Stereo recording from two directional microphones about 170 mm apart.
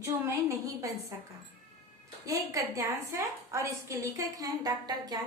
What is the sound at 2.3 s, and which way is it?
A woman's voice, 20° right (ahead or behind).